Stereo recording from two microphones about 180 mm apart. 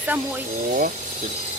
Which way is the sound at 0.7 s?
50° right (ahead or behind).